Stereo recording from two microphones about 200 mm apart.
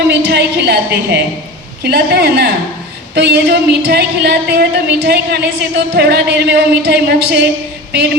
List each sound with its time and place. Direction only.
0.0 s a woman's voice: 55° right (ahead or behind)